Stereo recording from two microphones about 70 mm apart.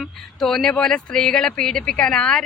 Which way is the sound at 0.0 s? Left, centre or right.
Centre.